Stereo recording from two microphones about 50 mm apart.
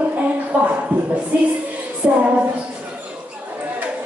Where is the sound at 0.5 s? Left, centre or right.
Right.